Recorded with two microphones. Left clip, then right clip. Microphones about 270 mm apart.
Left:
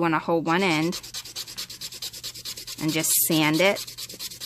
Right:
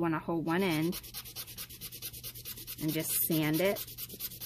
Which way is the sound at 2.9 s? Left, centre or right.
Left.